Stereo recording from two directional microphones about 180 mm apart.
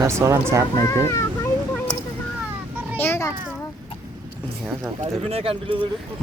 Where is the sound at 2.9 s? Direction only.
15° left (ahead or behind).